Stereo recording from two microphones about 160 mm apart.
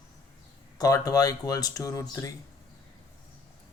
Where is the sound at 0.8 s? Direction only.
20° left (ahead or behind).